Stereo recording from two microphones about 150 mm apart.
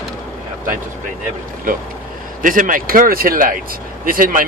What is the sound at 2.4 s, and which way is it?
Speech, 60° right (ahead or behind).